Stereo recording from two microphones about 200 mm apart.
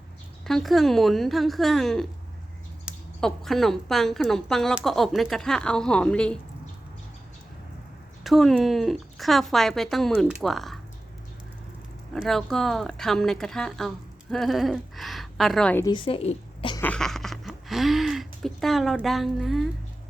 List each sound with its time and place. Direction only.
0.4 s speech: centre (ahead or behind)
8.2 s speech: centre (ahead or behind)
12.1 s speech: centre (ahead or behind)
15.8 s a woman's voice: 25° left (ahead or behind)
16.8 s a sound: 5° left (ahead or behind)